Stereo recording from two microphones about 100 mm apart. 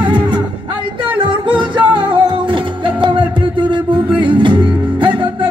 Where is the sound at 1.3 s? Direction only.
55° right (ahead or behind).